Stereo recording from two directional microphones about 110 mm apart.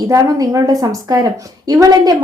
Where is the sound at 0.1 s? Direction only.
30° right (ahead or behind).